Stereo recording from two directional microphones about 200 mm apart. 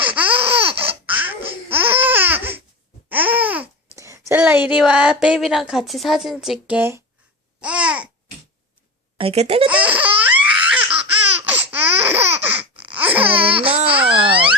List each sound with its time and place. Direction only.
0.0 s laughter: 10° right (ahead or behind)
0.8 s baby laughter: 10° right (ahead or behind)
1.7 s babbling: 10° right (ahead or behind)
3.9 s speech: 15° right (ahead or behind)
9.1 s speech: 30° right (ahead or behind)
9.6 s laughter: 5° right (ahead or behind)
13.1 s speech: 5° right (ahead or behind)
13.7 s speech: 25° right (ahead or behind)